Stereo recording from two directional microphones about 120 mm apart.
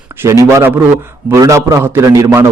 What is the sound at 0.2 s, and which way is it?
A man's voice, 25° right (ahead or behind).